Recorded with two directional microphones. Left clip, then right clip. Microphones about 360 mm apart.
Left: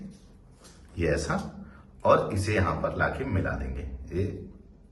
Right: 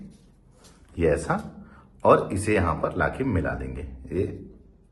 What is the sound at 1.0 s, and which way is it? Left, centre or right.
A man's voice, centre.